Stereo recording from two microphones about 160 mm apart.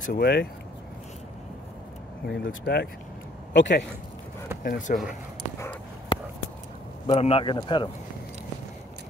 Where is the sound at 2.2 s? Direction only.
90° left.